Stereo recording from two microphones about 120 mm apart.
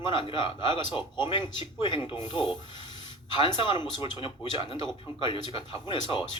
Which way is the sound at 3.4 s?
40° left (ahead or behind).